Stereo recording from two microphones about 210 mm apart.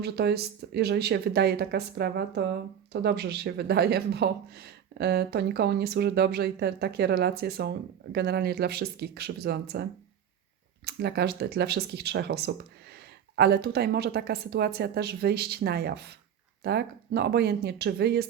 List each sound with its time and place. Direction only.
0.0 s speech: 50° right (ahead or behind)
10.8 s speech: 50° right (ahead or behind)